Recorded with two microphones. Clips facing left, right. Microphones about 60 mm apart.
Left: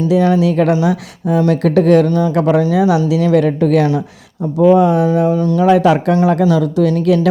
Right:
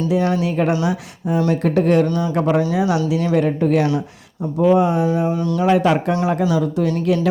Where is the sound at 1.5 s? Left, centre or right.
Left.